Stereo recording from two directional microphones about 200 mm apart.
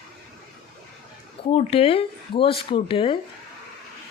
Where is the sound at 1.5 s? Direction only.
30° left (ahead or behind).